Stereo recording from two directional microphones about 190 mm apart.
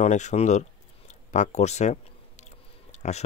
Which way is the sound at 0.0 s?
40° left (ahead or behind).